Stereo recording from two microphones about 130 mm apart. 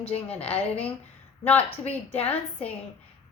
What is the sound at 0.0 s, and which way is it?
Speech, 50° left (ahead or behind).